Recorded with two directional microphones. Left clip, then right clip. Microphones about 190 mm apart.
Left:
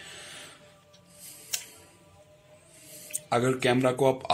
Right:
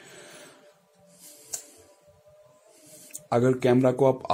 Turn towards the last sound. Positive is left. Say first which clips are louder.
# right 3 dB
turn(degrees=-50)  # may be behind; listen again after turning